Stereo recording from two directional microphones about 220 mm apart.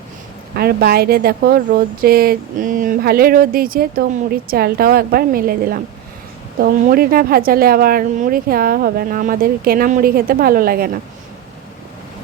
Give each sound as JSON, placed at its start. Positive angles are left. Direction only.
{"t": 0.5, "sound": "speech", "side_deg": -45}